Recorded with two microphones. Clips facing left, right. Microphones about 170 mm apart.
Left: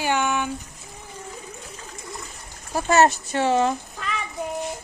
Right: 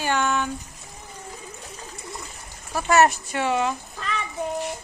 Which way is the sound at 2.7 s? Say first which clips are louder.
Left 1 dB; 30° left (ahead or behind).